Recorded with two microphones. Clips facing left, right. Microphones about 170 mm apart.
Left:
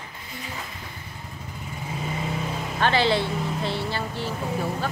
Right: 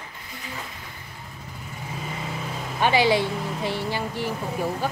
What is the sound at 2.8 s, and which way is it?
Speech, 10° right (ahead or behind).